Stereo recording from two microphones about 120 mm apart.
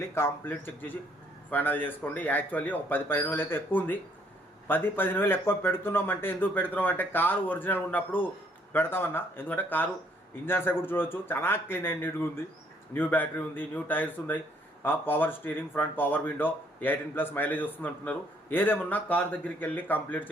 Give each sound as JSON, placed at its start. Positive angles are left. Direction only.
{"t": 0.1, "sound": "speech", "side_deg": 20}